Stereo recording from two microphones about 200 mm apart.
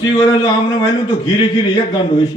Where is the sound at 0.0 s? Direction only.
20° left (ahead or behind).